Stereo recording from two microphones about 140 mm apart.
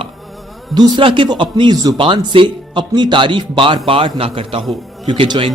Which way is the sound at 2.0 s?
35° right (ahead or behind).